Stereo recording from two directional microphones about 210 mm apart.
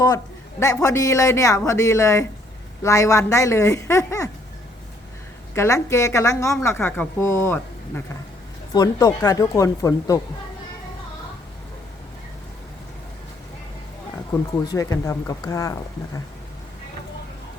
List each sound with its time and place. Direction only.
0.6 s a woman's voice: 15° left (ahead or behind)
5.5 s a woman's voice: 15° left (ahead or behind)
14.6 s a woman's voice: 15° left (ahead or behind)